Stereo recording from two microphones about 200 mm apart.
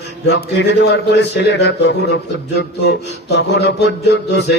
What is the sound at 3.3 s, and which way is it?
A man's voice, 60° left (ahead or behind).